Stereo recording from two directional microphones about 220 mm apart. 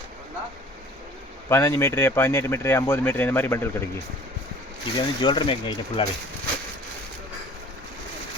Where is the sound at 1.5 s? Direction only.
10° left (ahead or behind).